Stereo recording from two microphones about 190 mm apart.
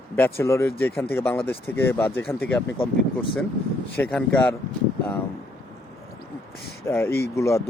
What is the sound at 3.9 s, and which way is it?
Speech, 10° left (ahead or behind).